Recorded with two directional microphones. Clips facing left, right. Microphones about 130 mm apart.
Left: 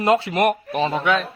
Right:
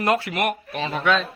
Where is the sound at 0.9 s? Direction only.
15° left (ahead or behind).